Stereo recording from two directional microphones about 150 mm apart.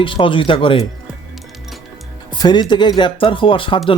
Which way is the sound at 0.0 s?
35° left (ahead or behind).